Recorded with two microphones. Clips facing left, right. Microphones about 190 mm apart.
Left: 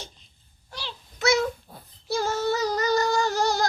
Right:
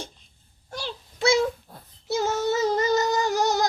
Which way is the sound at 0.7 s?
45° right (ahead or behind).